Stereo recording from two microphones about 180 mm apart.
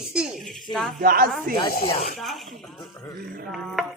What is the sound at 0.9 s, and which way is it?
Speech, 55° right (ahead or behind).